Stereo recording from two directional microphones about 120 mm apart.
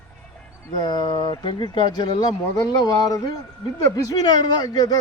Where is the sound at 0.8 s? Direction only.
40° left (ahead or behind).